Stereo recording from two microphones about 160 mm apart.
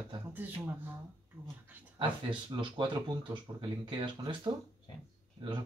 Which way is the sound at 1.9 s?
30° right (ahead or behind).